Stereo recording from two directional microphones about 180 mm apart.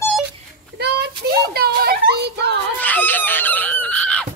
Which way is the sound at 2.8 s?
10° left (ahead or behind).